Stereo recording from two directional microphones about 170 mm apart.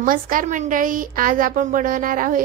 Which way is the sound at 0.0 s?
55° right (ahead or behind).